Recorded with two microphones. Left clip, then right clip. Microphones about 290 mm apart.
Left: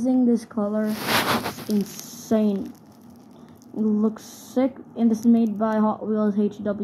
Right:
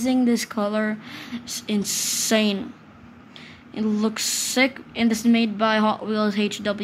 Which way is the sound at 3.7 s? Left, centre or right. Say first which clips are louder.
Even; right.